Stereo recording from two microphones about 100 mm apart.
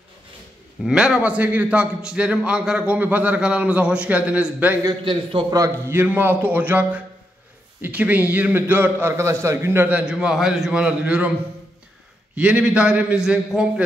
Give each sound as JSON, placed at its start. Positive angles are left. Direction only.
{"t": 0.8, "sound": "a man's voice", "side_deg": -10}
{"t": 5.5, "sound": "a man's voice", "side_deg": -35}
{"t": 5.9, "sound": "a man's voice", "side_deg": -20}
{"t": 12.4, "sound": "a man's voice", "side_deg": -10}